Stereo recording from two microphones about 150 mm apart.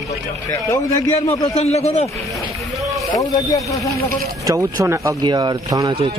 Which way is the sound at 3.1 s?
20° left (ahead or behind).